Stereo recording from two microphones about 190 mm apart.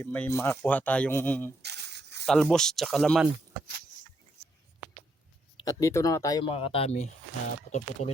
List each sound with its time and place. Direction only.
0.0 s speech: 10° left (ahead or behind)
1.6 s a sound: 60° right (ahead or behind)
2.2 s speech: 5° left (ahead or behind)
5.5 s speech: 15° left (ahead or behind); by 8.1 s 35° left (ahead or behind)